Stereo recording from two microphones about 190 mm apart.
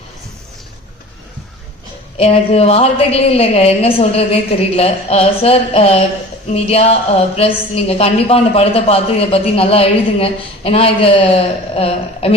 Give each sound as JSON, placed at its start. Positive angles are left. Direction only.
{"t": 2.1, "sound": "a woman's voice", "side_deg": 30}